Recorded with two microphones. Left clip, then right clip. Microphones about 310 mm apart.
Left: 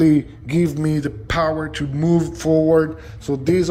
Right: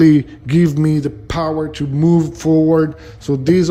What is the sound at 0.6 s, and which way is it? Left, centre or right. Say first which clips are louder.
Speech: right 5 dB; centre.